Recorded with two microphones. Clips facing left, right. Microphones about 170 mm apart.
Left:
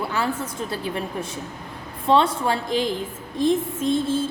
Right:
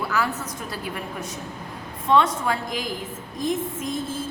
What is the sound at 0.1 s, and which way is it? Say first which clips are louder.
A woman's voice: left 1 dB; 30° left (ahead or behind).